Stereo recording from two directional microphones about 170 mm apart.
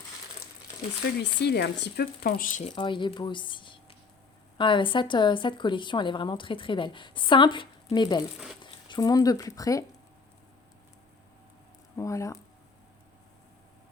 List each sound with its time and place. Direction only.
1.2 s speech: 85° left; by 2.7 s 45° left (ahead or behind)
2.7 s a woman's voice: 30° left (ahead or behind)
11.9 s speech: 15° left (ahead or behind)